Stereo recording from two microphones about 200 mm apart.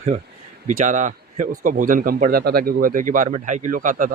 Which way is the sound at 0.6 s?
40° right (ahead or behind).